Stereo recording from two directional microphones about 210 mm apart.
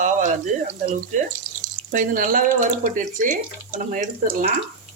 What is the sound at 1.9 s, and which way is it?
Speech, 40° right (ahead or behind).